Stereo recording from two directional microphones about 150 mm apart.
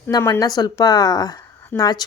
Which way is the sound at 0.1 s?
20° left (ahead or behind).